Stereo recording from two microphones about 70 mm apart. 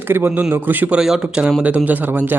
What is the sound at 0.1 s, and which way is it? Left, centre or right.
Speech, right.